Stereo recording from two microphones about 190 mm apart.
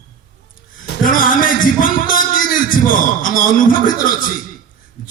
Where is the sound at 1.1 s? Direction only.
45° left (ahead or behind).